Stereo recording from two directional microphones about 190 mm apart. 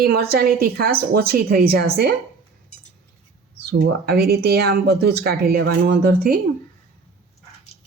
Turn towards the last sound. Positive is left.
turn(degrees=-55)  # may be behind; listen again after turning